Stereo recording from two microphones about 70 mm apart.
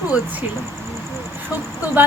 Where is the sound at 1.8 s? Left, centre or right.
Right.